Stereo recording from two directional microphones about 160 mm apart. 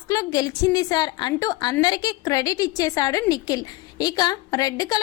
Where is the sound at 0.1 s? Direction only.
25° left (ahead or behind).